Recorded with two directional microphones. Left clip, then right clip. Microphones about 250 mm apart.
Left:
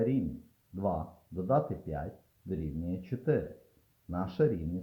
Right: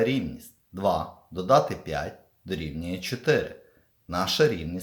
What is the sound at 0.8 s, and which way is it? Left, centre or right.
Speech, centre.